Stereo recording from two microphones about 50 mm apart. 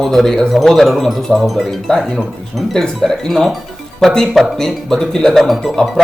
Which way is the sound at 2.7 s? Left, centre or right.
Centre.